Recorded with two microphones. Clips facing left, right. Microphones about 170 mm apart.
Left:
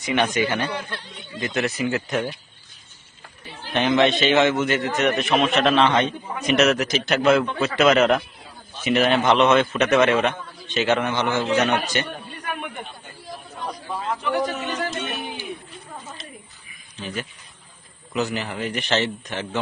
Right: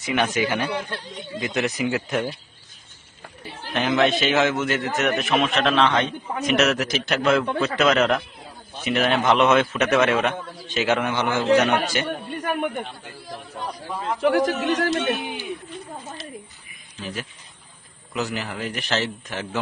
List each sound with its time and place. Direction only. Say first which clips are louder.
0.0 s a man's voice: left 1 dB; 5° right (ahead or behind)
3.7 s a man's voice: left 2 dB; centre (ahead or behind)
12.2 s a sound: right 7 dB; 55° right (ahead or behind)
14.2 s speech: right 7 dB; 90° right
17.0 s a man's voice: left 1 dB; centre (ahead or behind)